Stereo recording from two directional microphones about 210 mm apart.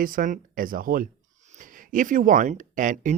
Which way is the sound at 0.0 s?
40° right (ahead or behind).